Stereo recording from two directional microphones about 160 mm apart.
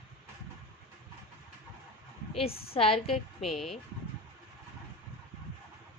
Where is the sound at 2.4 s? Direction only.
35° left (ahead or behind).